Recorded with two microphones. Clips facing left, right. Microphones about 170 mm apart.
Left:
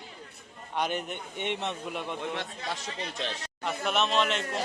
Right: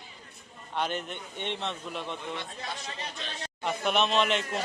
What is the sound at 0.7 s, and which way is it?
A man's voice, 10° left (ahead or behind).